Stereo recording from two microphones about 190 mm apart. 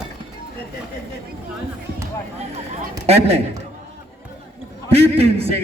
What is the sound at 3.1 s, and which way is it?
Speech, 30° right (ahead or behind).